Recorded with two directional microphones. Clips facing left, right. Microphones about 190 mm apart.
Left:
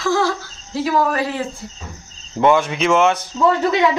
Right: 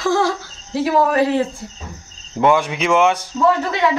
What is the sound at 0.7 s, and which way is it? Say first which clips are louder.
Speech: right 2 dB; 25° right (ahead or behind).